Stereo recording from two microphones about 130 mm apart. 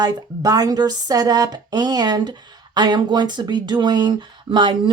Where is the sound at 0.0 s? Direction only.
30° right (ahead or behind).